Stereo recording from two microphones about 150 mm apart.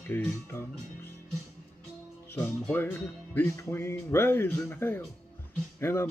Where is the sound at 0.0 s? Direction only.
15° left (ahead or behind).